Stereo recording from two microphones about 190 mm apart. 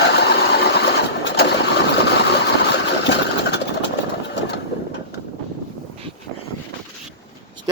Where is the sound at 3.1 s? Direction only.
65° left (ahead or behind).